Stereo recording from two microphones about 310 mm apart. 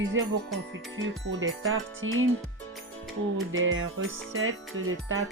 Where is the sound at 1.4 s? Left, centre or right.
Right.